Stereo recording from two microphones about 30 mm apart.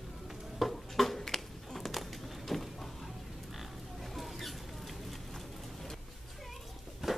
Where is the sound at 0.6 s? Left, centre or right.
Centre.